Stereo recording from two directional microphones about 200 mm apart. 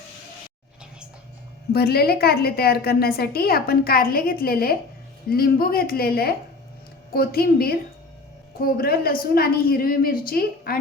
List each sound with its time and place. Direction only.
1.7 s a woman's voice: 50° left (ahead or behind)